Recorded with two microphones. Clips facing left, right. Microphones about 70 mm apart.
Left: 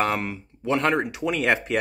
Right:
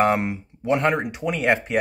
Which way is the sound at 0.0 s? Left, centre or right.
Right.